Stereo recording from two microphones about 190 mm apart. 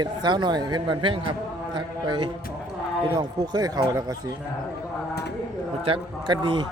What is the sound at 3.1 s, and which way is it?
A man's voice, 20° right (ahead or behind).